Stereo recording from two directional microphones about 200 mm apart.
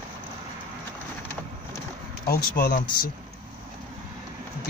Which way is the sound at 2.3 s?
45° left (ahead or behind).